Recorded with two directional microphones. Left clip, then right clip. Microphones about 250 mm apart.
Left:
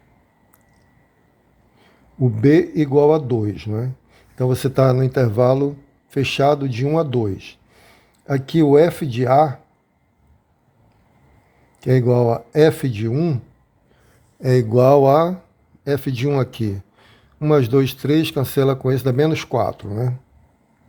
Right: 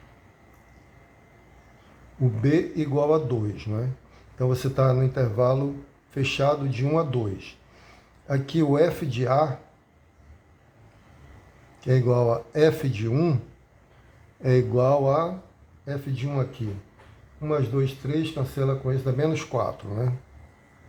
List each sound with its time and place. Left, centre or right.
2.4 s speech: left
11.8 s speech: left
14.4 s speech: left